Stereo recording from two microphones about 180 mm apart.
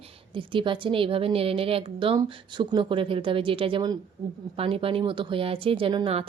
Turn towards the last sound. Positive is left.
turn(degrees=-30)  # may be behind; listen again after turning